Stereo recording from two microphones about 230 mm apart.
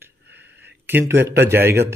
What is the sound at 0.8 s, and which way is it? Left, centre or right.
Speech, centre.